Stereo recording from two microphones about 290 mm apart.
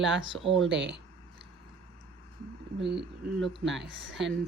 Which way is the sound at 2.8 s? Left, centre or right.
Right.